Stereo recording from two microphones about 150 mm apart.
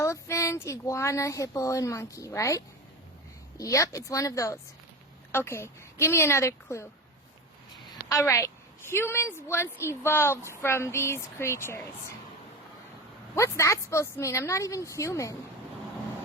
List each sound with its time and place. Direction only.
0.0 s a woman's voice: 20° left (ahead or behind)
8.1 s a woman's voice: 20° left (ahead or behind)
13.3 s speech: 20° left (ahead or behind)